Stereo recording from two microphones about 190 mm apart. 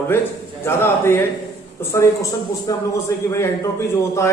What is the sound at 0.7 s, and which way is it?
A man's voice, 15° left (ahead or behind).